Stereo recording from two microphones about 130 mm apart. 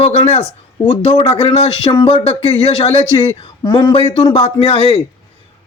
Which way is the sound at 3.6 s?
35° left (ahead or behind).